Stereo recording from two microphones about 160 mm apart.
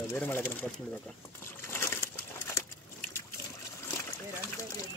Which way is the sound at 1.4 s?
15° left (ahead or behind).